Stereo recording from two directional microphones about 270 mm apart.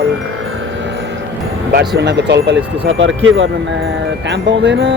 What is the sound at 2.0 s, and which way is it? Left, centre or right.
Speech, right.